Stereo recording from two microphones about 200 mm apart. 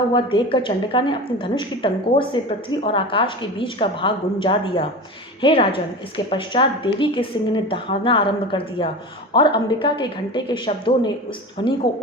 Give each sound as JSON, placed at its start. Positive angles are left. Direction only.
{"t": 0.1, "sound": "a woman's voice", "side_deg": 25}